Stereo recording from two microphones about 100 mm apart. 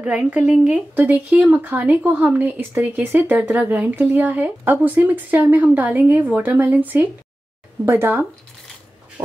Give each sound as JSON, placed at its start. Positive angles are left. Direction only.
{"t": 0.0, "sound": "a woman's voice", "side_deg": -10}